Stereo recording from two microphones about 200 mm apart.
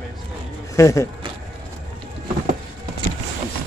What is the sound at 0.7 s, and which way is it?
Speech, 15° left (ahead or behind).